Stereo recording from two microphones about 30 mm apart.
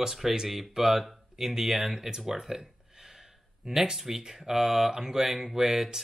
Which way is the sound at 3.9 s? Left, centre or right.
Centre.